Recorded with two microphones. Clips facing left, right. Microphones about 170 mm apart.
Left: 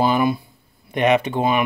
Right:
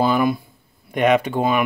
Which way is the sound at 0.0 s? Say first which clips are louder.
Even; 45° right (ahead or behind).